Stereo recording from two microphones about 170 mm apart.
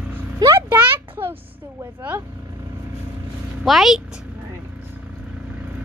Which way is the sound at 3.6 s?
Centre (ahead or behind).